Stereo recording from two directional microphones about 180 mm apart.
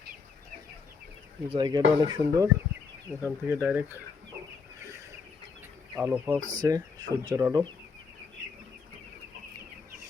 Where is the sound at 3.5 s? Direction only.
10° right (ahead or behind).